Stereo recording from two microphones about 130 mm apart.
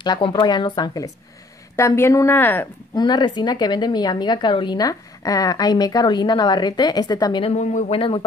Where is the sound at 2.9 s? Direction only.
35° left (ahead or behind).